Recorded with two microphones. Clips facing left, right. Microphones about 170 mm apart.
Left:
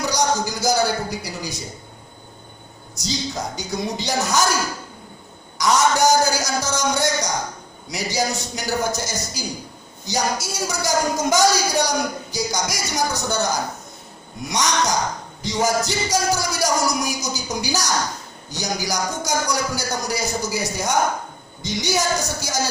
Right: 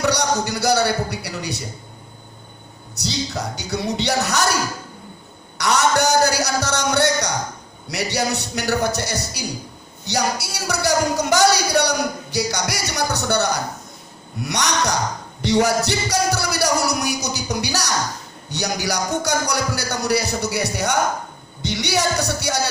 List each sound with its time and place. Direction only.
0.0 s a man's voice: 65° right (ahead or behind)
2.9 s speech: 65° right (ahead or behind)
5.5 s speech: 65° right (ahead or behind)
15.4 s music: 65° right (ahead or behind)
18.5 s speech: 65° right (ahead or behind)